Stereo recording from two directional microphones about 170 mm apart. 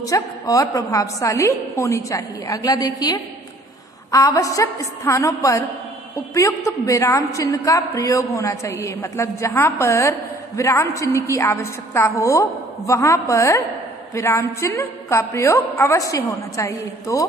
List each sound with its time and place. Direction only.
0.0 s a woman's voice: 20° left (ahead or behind)
4.1 s a woman's voice: 20° left (ahead or behind)